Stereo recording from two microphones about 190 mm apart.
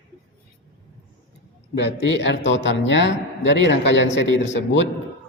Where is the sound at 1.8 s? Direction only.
65° left (ahead or behind).